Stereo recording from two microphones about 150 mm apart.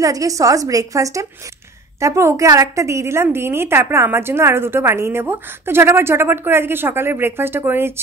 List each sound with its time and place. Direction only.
0.0 s a woman's voice: 20° right (ahead or behind)